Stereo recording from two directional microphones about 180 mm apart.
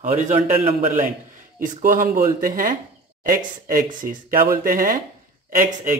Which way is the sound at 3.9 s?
50° right (ahead or behind).